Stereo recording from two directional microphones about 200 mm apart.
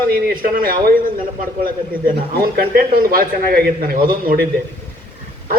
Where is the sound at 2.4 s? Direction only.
50° right (ahead or behind).